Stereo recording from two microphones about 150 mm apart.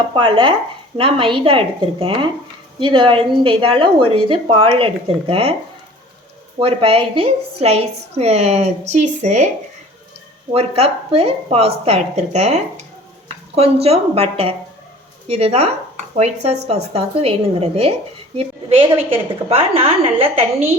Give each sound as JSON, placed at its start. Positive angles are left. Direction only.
{"t": 0.1, "sound": "speech", "side_deg": -35}
{"t": 6.6, "sound": "a woman's voice", "side_deg": -40}
{"t": 10.5, "sound": "a woman's voice", "side_deg": -40}